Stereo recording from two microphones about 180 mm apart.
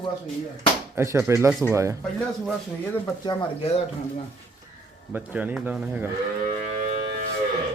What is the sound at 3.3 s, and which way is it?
Speech, 30° left (ahead or behind).